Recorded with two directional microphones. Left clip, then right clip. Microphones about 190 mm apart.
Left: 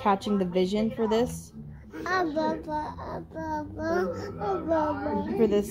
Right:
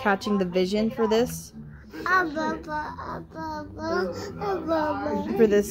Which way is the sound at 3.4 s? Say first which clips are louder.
Left 1 dB; 30° left (ahead or behind).